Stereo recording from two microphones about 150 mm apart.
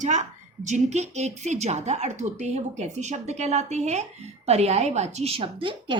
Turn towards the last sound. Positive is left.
turn(degrees=-35)  # may be behind; listen again after turning